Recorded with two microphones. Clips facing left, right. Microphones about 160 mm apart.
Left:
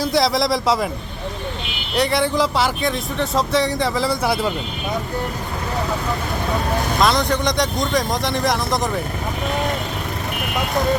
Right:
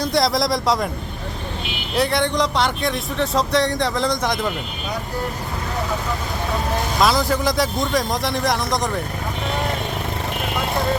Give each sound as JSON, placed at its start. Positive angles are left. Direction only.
{"t": 0.0, "sound": "speech", "side_deg": 0}
{"t": 2.0, "sound": "speech", "side_deg": 0}
{"t": 7.0, "sound": "speech", "side_deg": -5}